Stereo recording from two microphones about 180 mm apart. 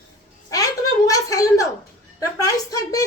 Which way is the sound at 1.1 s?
20° left (ahead or behind).